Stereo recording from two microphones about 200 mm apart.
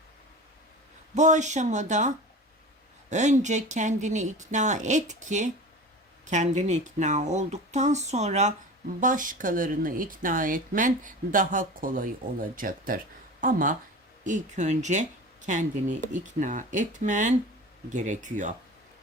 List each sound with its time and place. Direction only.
1.1 s speech: 35° right (ahead or behind)